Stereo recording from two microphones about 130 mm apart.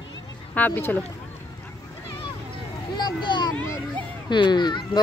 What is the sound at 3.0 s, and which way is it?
Speech, 35° left (ahead or behind).